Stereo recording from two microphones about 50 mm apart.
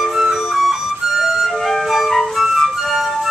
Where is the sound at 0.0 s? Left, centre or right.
Centre.